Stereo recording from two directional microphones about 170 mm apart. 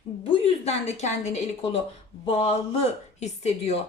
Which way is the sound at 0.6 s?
40° left (ahead or behind).